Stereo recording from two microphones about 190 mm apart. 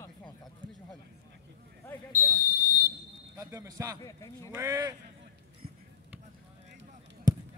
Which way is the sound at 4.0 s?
20° left (ahead or behind).